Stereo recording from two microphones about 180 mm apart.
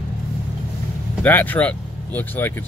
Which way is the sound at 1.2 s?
10° left (ahead or behind).